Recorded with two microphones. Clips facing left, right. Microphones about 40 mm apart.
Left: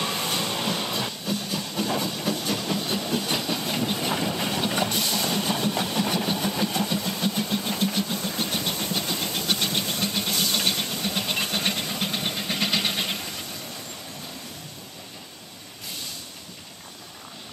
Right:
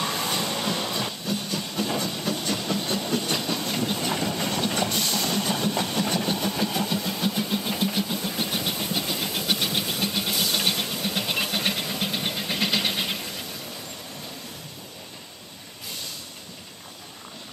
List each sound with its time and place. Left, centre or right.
0.0 s train: centre